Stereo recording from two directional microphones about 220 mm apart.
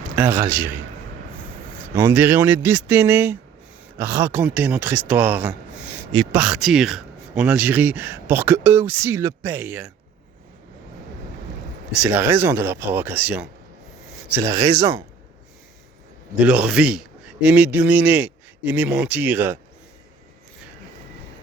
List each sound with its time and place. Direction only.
0.2 s speech: 10° right (ahead or behind)
2.0 s speech: 10° right (ahead or behind)
11.9 s speech: 5° right (ahead or behind)
14.3 s speech: 15° right (ahead or behind)
16.5 s speech: 5° right (ahead or behind)